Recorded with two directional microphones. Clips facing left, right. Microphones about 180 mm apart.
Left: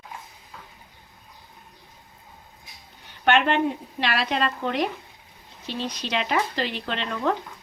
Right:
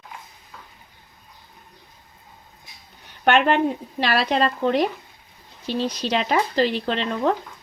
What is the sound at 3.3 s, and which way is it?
Speech, 40° right (ahead or behind).